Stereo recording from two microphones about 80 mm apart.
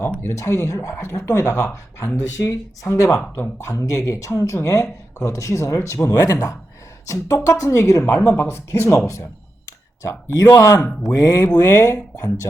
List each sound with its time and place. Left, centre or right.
0.2 s speech: left
11.1 s music: left
11.6 s speech: left